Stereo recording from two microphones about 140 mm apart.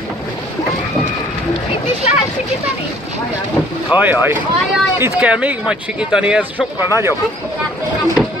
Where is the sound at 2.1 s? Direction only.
50° left (ahead or behind).